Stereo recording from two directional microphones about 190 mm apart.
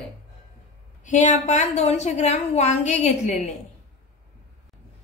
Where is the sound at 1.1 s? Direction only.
40° left (ahead or behind).